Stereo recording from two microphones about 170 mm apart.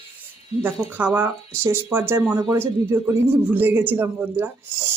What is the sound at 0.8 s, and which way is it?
Speech, 10° right (ahead or behind).